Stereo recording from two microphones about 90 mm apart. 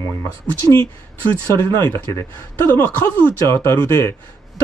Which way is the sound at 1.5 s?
30° left (ahead or behind).